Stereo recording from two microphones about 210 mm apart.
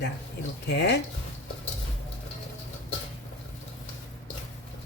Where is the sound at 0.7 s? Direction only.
55° left (ahead or behind).